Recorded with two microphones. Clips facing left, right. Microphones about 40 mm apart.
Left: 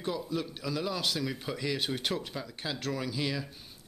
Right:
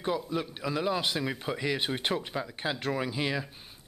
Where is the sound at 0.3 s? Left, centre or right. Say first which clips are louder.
Right 2 dB; right.